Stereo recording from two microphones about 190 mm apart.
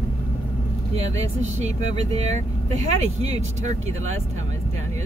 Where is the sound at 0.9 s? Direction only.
35° right (ahead or behind).